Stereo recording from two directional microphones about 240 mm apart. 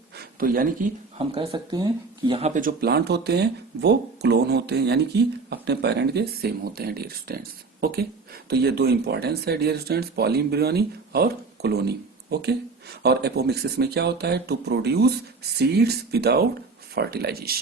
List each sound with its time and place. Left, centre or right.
0.2 s a sound: right
1.2 s speech: right
2.6 s speech: right